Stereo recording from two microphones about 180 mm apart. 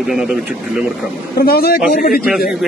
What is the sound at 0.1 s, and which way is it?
Speech, centre (ahead or behind).